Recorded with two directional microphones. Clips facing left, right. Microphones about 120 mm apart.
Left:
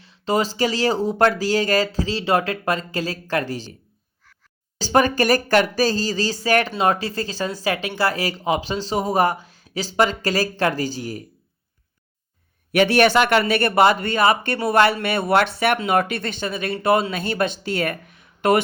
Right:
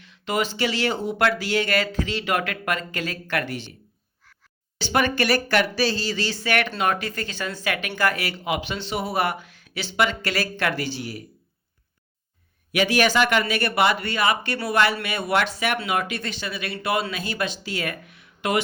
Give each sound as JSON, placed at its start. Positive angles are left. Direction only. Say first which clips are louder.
{"t": 0.0, "sound": "speech", "louder": "left 4 dB", "side_deg": 35}
{"t": 4.8, "sound": "speech", "louder": "left 4 dB", "side_deg": 40}
{"t": 12.7, "sound": "speech", "louder": "left 5 dB", "side_deg": 50}